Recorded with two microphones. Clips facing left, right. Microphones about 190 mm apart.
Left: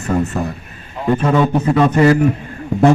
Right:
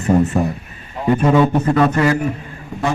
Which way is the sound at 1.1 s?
5° right (ahead or behind).